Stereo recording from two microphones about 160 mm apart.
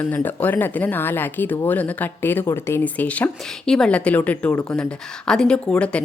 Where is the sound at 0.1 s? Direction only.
10° left (ahead or behind).